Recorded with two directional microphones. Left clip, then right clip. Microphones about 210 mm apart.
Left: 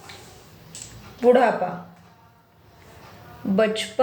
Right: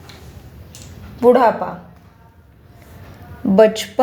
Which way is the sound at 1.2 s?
30° right (ahead or behind).